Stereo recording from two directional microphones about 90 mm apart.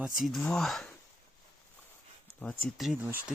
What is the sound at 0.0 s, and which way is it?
Speech, centre (ahead or behind).